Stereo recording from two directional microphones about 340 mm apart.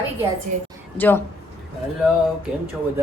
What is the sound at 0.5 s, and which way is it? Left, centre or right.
Speech, right.